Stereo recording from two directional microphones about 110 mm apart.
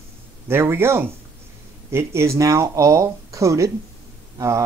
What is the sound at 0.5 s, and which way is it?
Speech, 20° right (ahead or behind).